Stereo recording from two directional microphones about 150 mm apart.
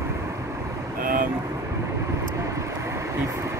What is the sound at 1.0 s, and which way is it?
Vehicle, 70° right (ahead or behind).